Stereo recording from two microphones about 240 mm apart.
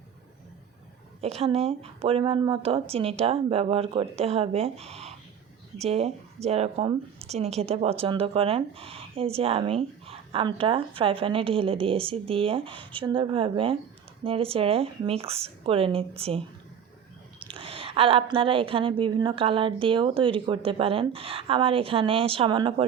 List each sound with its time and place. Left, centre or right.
1.2 s a woman's voice: right
17.5 s a woman's voice: right